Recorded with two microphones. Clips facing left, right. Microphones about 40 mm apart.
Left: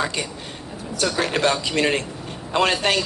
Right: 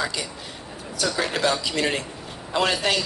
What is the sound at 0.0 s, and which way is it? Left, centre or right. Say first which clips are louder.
A woman's voice: left 3 dB; left.